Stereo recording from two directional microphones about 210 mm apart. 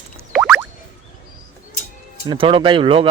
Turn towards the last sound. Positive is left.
turn(degrees=-25)  # may be behind; listen again after turning